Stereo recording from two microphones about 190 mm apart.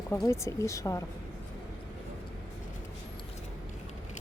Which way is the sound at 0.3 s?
15° left (ahead or behind).